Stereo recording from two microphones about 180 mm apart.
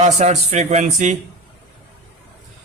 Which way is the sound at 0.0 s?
40° right (ahead or behind).